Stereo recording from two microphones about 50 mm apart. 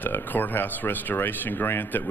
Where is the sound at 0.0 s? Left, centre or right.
Left.